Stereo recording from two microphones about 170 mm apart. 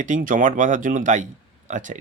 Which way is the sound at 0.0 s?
50° right (ahead or behind).